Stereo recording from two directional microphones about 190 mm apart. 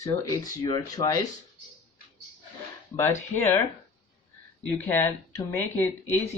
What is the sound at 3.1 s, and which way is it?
Speech, 40° left (ahead or behind).